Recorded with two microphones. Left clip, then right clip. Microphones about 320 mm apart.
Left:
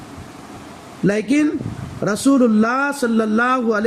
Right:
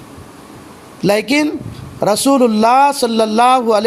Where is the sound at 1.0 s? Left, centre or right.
Centre.